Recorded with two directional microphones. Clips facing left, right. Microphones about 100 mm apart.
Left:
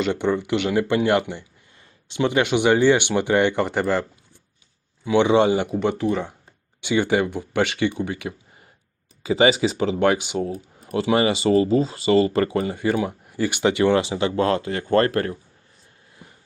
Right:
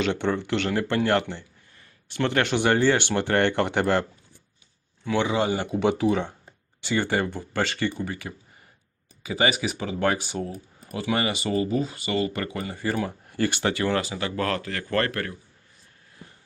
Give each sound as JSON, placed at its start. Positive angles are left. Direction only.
{"t": 0.0, "sound": "speech", "side_deg": 10}
{"t": 5.0, "sound": "speech", "side_deg": 20}
{"t": 5.6, "sound": "speech", "side_deg": 0}
{"t": 6.8, "sound": "speech", "side_deg": 15}